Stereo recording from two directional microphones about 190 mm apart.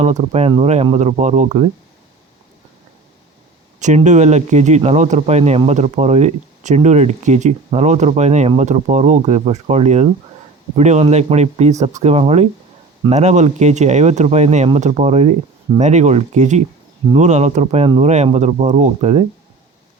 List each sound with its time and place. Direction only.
0.0 s speech: 35° right (ahead or behind)
3.8 s speech: 40° right (ahead or behind)